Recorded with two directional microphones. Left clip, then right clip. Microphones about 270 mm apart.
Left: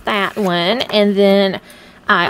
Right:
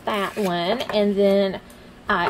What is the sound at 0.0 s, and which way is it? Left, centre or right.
A woman's voice, left.